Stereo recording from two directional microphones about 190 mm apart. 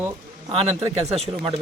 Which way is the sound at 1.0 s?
35° right (ahead or behind).